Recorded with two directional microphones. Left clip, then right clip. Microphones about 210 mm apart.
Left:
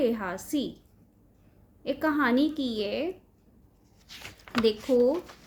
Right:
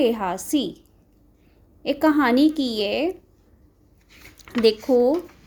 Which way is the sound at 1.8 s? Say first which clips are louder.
Right 7 dB; 35° right (ahead or behind).